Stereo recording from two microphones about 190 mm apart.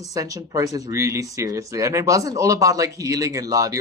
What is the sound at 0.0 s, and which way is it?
Speech, 15° right (ahead or behind).